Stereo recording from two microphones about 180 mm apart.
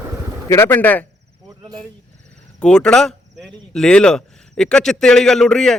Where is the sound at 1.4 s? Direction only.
20° right (ahead or behind).